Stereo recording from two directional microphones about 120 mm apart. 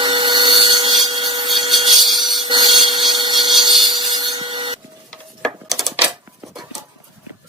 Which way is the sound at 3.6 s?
40° right (ahead or behind).